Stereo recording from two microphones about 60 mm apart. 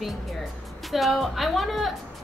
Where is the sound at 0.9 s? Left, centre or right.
Centre.